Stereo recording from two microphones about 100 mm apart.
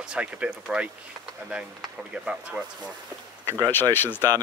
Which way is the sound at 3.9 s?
20° left (ahead or behind).